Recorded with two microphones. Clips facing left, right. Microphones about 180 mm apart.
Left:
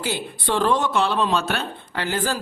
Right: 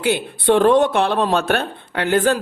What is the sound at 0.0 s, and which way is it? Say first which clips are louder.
A man's voice: right 8 dB; 60° right (ahead or behind).